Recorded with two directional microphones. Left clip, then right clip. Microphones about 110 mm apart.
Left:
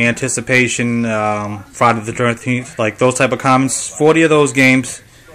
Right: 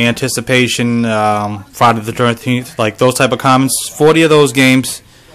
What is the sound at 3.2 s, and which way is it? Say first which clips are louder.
Speech: right 2 dB; 25° right (ahead or behind).